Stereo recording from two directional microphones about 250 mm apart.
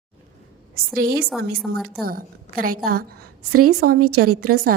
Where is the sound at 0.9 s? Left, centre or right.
Right.